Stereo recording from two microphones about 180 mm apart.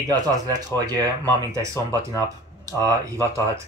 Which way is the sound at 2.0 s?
20° right (ahead or behind).